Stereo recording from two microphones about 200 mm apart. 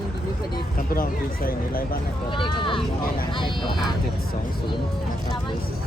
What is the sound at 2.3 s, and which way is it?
Speech, 25° left (ahead or behind).